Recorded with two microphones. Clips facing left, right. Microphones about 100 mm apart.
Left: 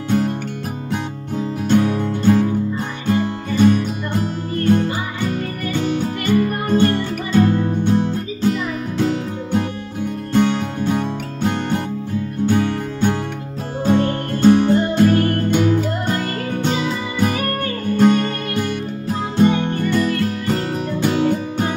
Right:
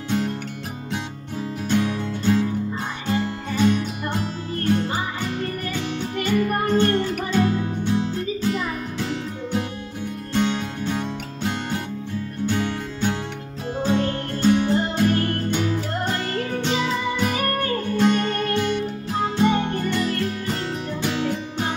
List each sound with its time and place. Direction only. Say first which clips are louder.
1.7 s music: left 6 dB; 50° left (ahead or behind)